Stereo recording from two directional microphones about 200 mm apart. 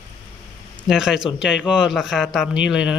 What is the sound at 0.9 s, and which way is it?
A man's voice, centre (ahead or behind).